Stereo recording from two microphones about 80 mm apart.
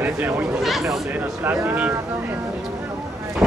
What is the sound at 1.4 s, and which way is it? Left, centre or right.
Speech, right.